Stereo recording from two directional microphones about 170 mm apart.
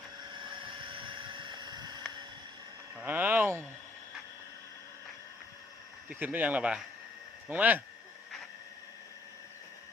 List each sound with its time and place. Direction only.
0.3 s vehicle: 30° right (ahead or behind)
2.9 s a sound: 10° right (ahead or behind)
6.1 s speech: 10° right (ahead or behind)